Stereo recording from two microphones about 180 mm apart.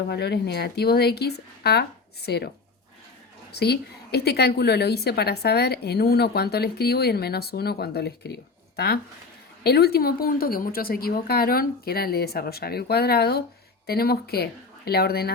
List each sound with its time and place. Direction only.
0.1 s a woman's voice: 65° left (ahead or behind)
3.5 s a woman's voice: 65° left (ahead or behind)